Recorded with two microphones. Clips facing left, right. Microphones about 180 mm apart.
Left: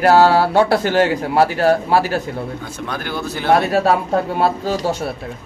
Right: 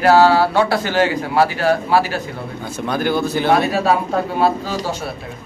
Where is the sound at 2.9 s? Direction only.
5° right (ahead or behind).